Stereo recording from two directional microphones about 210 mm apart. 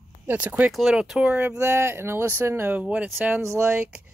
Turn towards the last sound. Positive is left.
turn(degrees=-5)  # may be behind; listen again after turning